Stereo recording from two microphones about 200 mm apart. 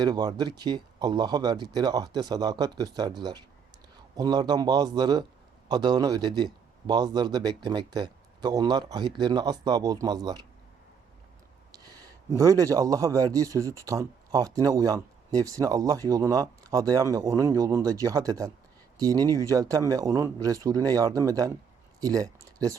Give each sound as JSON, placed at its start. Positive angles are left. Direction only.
{"t": 0.0, "sound": "a man's voice", "side_deg": -20}
{"t": 12.4, "sound": "a man's voice", "side_deg": -15}